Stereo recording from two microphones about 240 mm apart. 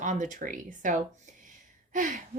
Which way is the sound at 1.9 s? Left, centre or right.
Right.